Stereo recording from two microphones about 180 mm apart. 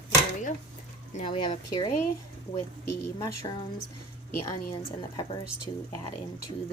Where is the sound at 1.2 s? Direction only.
25° left (ahead or behind).